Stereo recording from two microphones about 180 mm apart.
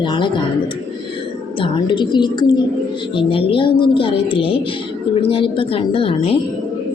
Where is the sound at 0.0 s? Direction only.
25° left (ahead or behind).